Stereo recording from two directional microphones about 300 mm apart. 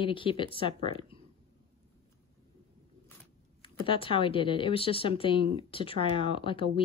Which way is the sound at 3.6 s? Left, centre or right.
Centre.